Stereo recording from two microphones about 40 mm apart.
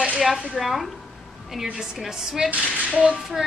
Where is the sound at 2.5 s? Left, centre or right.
Right.